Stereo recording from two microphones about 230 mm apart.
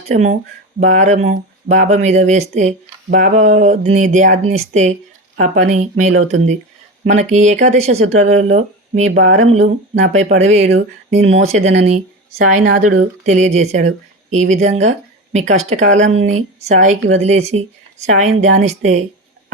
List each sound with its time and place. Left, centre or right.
0.1 s speech: right